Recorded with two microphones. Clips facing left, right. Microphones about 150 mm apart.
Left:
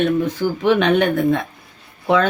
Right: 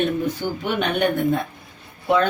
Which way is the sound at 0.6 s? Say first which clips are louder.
Left 7 dB; 90° left.